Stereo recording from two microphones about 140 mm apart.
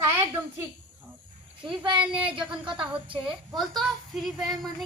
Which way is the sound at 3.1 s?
35° right (ahead or behind).